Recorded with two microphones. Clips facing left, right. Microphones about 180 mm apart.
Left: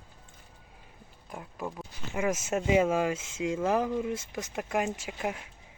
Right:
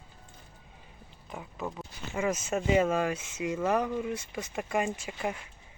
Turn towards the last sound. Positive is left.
turn(degrees=5)  # may be behind; listen again after turning